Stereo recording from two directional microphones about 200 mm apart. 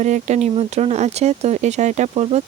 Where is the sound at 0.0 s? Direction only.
35° right (ahead or behind).